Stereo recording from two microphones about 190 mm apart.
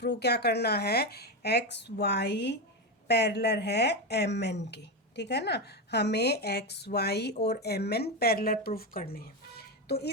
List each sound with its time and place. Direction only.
0.0 s speech: 60° left (ahead or behind)